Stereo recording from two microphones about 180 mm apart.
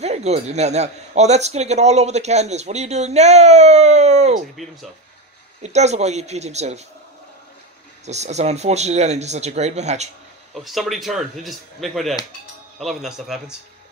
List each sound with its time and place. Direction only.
0.0 s a man's voice: 35° right (ahead or behind)
4.6 s speech: centre (ahead or behind)
5.6 s a man's voice: 40° right (ahead or behind)
8.0 s a man's voice: 40° right (ahead or behind)
10.5 s speech: centre (ahead or behind)